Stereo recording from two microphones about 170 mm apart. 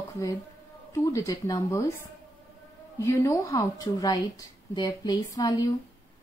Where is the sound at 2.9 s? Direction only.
15° left (ahead or behind).